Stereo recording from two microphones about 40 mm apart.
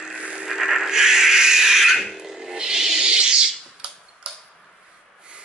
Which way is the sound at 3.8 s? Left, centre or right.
Right.